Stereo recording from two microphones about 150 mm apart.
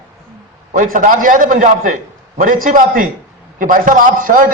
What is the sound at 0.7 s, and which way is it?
A man's voice, 60° right (ahead or behind).